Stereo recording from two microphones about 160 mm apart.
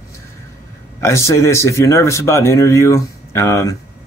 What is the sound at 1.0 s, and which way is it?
Speech, 15° left (ahead or behind).